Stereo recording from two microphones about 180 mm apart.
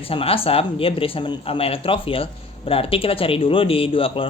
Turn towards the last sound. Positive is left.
turn(degrees=30)  # may be behind; listen again after turning